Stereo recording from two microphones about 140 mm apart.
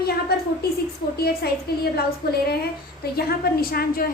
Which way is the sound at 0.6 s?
90° left.